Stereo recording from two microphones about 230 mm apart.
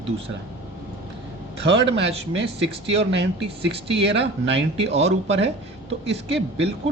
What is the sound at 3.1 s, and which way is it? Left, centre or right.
Speech, right.